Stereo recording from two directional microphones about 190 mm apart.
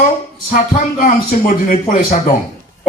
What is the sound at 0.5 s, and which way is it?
Speech, 45° left (ahead or behind).